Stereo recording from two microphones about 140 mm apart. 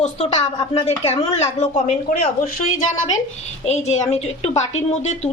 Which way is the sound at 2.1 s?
90° left.